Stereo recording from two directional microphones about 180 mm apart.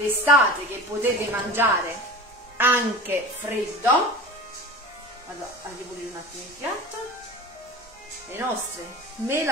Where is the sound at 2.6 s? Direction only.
10° right (ahead or behind).